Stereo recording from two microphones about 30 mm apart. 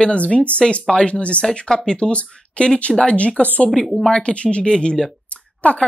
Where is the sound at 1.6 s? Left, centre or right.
Left.